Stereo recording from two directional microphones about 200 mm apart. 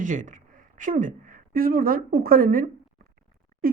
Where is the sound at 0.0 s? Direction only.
40° right (ahead or behind).